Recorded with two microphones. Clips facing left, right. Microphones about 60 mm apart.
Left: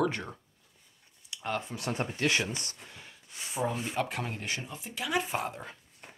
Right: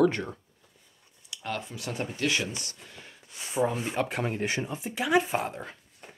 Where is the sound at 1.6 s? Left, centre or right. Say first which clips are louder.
Left 1 dB; left.